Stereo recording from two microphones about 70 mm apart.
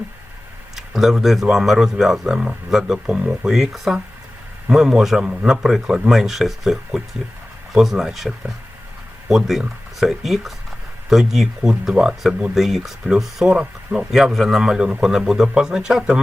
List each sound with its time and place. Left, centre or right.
0.8 s a man's voice: centre
9.3 s a man's voice: centre